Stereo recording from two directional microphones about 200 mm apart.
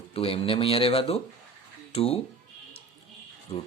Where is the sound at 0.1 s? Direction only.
30° left (ahead or behind).